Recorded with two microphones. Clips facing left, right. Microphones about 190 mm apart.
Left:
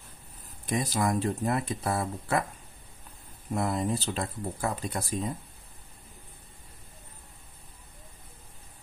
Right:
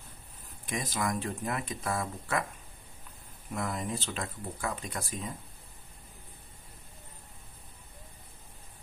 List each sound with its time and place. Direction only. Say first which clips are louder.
0.7 s speech: left 5 dB; 35° left (ahead or behind)
3.5 s speech: left 6 dB; 35° left (ahead or behind)